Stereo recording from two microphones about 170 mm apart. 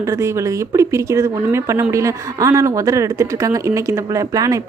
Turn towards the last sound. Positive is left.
turn(degrees=-20)  # may be behind; listen again after turning